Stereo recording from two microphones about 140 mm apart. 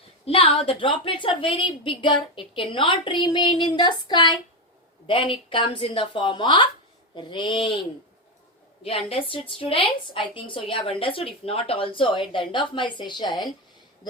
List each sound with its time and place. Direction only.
0.3 s a woman's voice: 45° left (ahead or behind)